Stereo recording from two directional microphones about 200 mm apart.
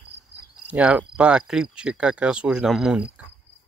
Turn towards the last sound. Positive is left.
turn(degrees=0)  # may be behind; listen again after turning